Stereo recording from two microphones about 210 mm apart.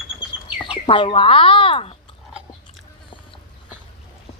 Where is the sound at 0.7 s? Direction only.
25° left (ahead or behind).